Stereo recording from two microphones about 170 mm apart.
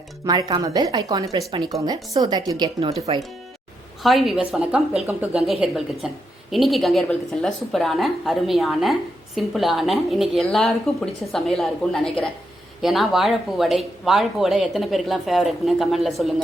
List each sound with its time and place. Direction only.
0.3 s speech: 25° right (ahead or behind)
4.0 s a woman's voice: centre (ahead or behind)